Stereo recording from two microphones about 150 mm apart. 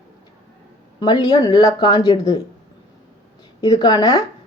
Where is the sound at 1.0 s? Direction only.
30° left (ahead or behind).